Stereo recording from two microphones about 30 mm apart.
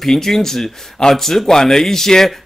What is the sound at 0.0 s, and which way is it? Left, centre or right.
Speech, centre.